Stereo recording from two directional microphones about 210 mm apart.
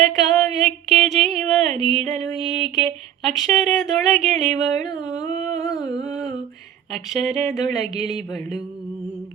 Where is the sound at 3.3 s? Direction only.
Centre (ahead or behind).